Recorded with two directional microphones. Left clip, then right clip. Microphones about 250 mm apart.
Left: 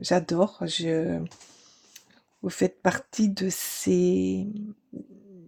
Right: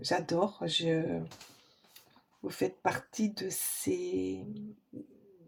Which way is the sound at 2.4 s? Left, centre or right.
Left.